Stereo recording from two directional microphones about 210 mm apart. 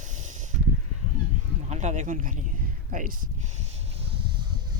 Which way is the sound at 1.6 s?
35° right (ahead or behind).